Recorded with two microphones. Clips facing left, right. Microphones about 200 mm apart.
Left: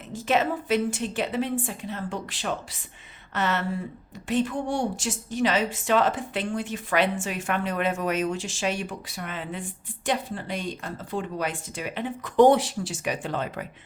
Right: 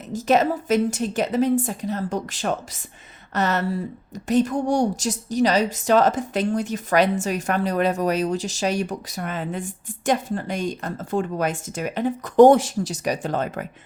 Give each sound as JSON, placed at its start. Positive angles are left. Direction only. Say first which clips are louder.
{"t": 0.1, "sound": "a woman's voice", "louder": "right 5 dB", "side_deg": -40}